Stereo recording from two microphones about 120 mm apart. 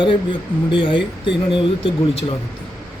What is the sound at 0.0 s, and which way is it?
Speech, 45° left (ahead or behind).